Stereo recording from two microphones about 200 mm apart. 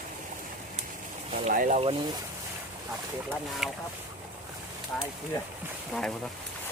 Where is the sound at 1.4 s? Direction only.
40° right (ahead or behind).